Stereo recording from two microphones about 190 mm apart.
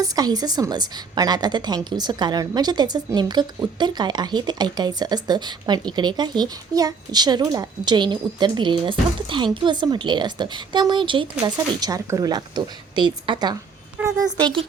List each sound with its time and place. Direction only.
0.0 s a woman's voice: 20° right (ahead or behind)
14.0 s a sound: 5° right (ahead or behind)
14.3 s a woman's voice: 25° right (ahead or behind)